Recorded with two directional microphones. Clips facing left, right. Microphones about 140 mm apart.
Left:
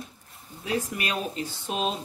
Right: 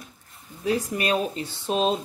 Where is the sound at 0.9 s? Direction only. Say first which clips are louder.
Right 6 dB; 35° right (ahead or behind).